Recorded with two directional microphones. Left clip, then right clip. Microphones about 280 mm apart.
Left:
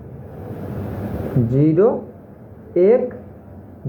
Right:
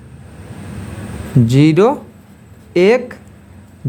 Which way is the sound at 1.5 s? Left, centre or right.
Right.